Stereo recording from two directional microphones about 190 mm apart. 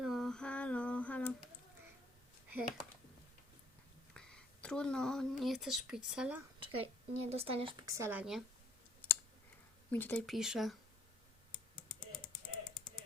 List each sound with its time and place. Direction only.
0.0 s female singing: centre (ahead or behind)
2.5 s speech: 10° right (ahead or behind)
4.1 s speech: 5° left (ahead or behind)
6.6 s a woman's voice: 30° right (ahead or behind); by 8.4 s 5° right (ahead or behind)
9.9 s speech: 10° left (ahead or behind)